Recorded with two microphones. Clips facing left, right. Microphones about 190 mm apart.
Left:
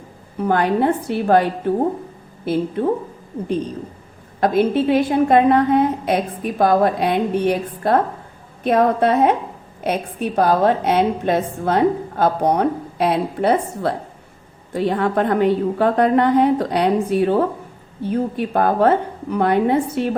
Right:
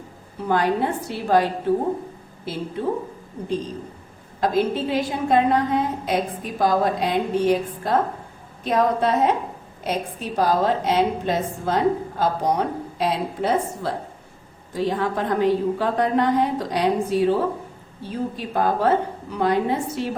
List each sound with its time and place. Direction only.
0.4 s a woman's voice: 55° left (ahead or behind)
4.4 s a woman's voice: 60° left (ahead or behind)